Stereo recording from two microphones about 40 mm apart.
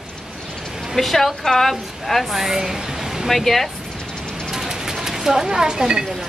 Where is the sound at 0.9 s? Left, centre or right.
Centre.